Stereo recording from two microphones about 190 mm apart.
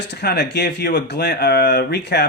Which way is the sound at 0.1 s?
60° left (ahead or behind).